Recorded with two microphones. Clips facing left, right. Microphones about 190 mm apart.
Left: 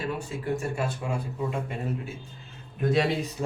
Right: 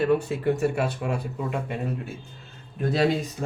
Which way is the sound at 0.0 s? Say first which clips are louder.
Right 9 dB; 65° right (ahead or behind).